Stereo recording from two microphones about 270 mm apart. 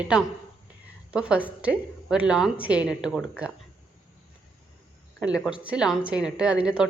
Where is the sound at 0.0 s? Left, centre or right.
Centre.